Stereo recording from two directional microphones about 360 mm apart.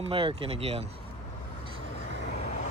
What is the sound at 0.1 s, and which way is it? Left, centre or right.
Speech, centre.